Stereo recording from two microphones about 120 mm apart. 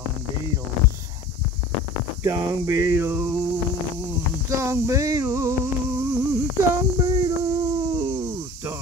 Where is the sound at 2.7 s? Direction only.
20° right (ahead or behind).